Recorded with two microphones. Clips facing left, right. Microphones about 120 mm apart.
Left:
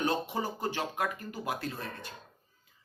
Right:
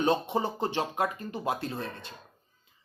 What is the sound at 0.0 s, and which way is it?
A man's voice, 25° right (ahead or behind).